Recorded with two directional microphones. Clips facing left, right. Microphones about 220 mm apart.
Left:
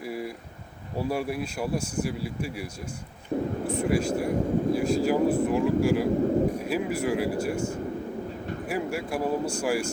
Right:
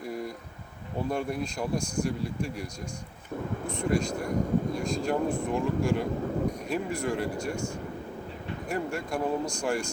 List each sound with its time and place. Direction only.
0.0 s a sound: 5° left (ahead or behind)
0.9 s speech: 5° left (ahead or behind)
3.3 s speech: 35° left (ahead or behind)
3.7 s speech: 5° left (ahead or behind)